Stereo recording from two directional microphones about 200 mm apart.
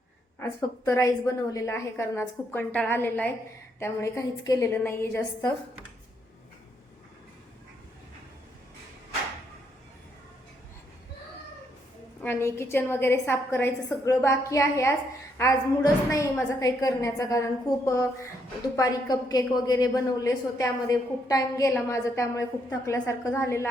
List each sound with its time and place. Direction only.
0.9 s a woman's voice: 15° left (ahead or behind)
12.2 s a woman's voice: 10° left (ahead or behind)